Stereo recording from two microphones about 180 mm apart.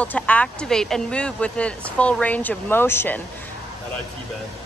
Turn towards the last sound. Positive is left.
turn(degrees=10)  # may be behind; listen again after turning